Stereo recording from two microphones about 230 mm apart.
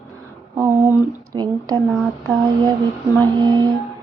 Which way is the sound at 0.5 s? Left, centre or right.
Centre.